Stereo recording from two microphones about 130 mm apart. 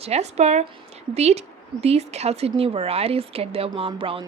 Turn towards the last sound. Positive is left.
turn(degrees=-45)  # may be behind; listen again after turning